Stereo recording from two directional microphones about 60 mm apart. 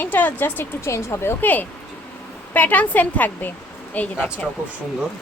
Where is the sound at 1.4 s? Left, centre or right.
Left.